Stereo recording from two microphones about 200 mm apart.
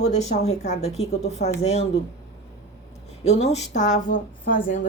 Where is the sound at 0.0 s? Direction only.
35° left (ahead or behind).